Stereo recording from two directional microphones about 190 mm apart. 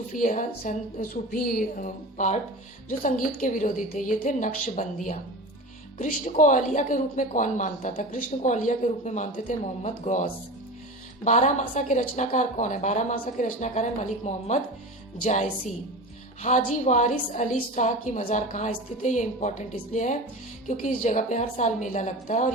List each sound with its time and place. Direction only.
0.1 s a woman's voice: 40° left (ahead or behind)